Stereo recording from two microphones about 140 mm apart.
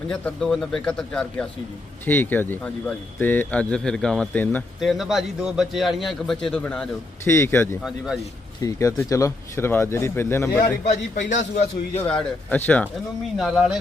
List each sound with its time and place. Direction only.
0.1 s speech: 5° left (ahead or behind)
4.8 s a man's voice: centre (ahead or behind)
7.3 s speech: 20° left (ahead or behind)
7.9 s a man's voice: 5° right (ahead or behind)
8.6 s speech: 25° left (ahead or behind)
10.8 s a man's voice: 60° left (ahead or behind)
12.0 s speech: 10° left (ahead or behind)
13.3 s a man's voice: centre (ahead or behind)